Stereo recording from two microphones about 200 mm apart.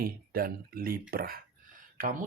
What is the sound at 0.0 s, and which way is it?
Speech, 45° right (ahead or behind).